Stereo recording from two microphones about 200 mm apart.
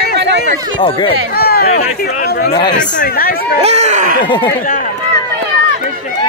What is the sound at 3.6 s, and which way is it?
Speech, 35° right (ahead or behind).